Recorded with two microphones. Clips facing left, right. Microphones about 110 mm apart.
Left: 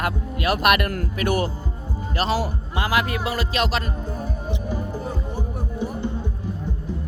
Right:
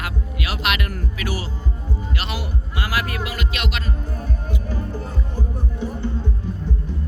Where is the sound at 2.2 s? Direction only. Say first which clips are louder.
Left 11 dB; 40° left (ahead or behind).